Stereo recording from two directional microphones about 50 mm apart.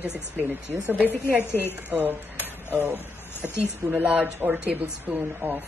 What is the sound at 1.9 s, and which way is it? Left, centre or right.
Speech, right.